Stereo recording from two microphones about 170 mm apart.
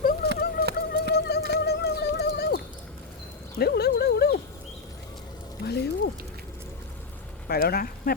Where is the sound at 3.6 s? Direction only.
70° left (ahead or behind).